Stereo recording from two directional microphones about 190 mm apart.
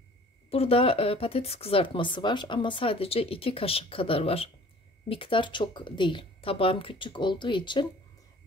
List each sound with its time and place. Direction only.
0.5 s speech: 30° left (ahead or behind)